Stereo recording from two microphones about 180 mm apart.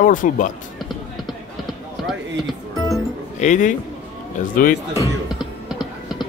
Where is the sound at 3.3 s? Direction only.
45° left (ahead or behind).